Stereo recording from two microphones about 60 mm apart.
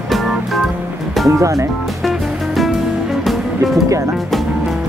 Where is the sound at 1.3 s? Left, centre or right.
Right.